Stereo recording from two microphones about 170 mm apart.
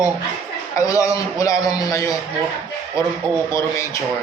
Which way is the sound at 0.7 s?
20° left (ahead or behind).